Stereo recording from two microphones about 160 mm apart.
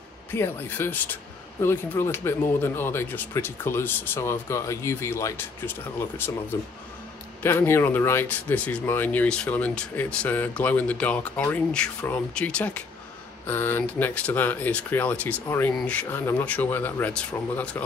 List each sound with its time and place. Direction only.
0.3 s speech: 15° left (ahead or behind)